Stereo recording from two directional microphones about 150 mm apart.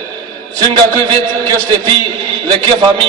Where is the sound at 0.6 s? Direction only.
30° right (ahead or behind).